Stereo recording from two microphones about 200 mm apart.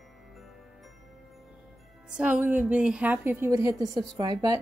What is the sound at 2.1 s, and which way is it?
A woman's voice, 5° right (ahead or behind).